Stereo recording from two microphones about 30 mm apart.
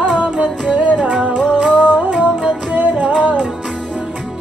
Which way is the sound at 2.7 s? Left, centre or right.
Right.